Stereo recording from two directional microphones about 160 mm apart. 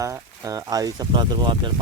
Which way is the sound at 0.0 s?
20° right (ahead or behind).